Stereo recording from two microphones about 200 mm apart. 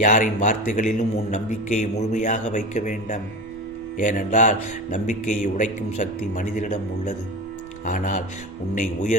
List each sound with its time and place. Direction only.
0.0 s speech: 40° left (ahead or behind)